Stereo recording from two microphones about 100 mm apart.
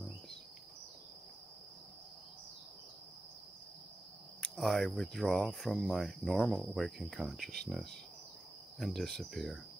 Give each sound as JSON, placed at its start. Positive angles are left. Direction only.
{"t": 4.4, "sound": "speech", "side_deg": 0}